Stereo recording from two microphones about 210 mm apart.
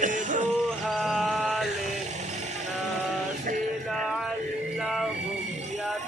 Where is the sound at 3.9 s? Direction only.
Centre (ahead or behind).